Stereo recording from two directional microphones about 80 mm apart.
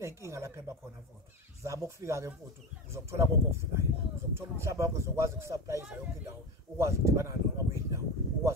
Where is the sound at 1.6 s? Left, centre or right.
Right.